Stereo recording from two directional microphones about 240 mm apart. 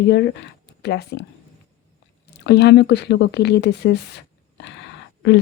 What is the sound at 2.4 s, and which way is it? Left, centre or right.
Speech, left.